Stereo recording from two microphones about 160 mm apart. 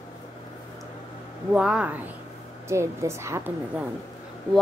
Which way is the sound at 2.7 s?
15° right (ahead or behind).